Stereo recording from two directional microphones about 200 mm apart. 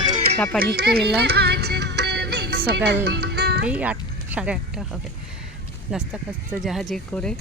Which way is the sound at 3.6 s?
5° right (ahead or behind).